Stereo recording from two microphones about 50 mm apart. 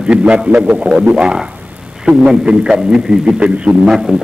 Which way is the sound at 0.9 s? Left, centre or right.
Centre.